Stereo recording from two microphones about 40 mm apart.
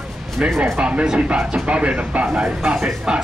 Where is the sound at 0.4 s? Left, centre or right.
Right.